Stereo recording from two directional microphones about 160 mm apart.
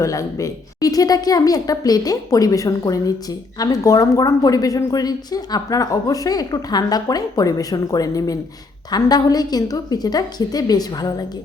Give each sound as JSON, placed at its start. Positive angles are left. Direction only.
{"t": 0.0, "sound": "a woman's voice", "side_deg": 20}